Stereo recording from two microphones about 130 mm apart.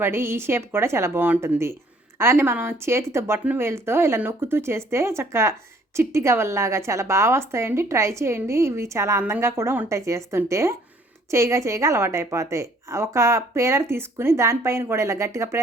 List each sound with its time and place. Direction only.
0.0 s a woman's voice: 20° right (ahead or behind)